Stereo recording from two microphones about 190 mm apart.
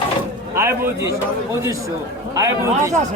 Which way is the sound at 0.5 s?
15° right (ahead or behind).